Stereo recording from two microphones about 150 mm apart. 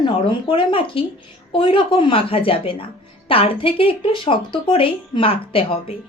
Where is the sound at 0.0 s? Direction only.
35° left (ahead or behind).